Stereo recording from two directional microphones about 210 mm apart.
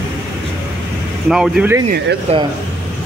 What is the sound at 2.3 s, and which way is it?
Speech, 30° right (ahead or behind).